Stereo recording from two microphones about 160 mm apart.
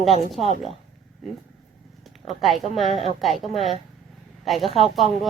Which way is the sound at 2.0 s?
Centre (ahead or behind).